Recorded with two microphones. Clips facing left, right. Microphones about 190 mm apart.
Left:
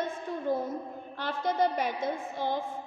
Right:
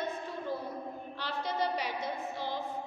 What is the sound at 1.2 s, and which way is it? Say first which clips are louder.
A woman's voice: left 6 dB; 50° left (ahead or behind).